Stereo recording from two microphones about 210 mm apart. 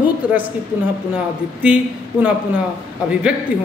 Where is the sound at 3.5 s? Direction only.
5° right (ahead or behind).